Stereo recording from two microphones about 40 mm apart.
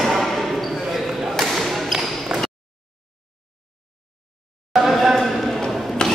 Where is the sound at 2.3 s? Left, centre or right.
Right.